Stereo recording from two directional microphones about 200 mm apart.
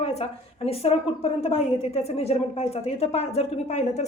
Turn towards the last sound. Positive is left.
turn(degrees=30)  # may be behind; listen again after turning